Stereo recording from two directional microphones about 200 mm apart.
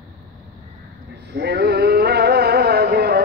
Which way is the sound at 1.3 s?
55° right (ahead or behind).